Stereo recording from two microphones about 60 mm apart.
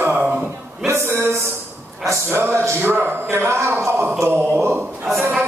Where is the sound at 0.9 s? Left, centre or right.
Right.